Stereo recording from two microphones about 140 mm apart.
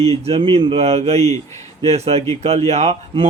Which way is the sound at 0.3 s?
45° right (ahead or behind).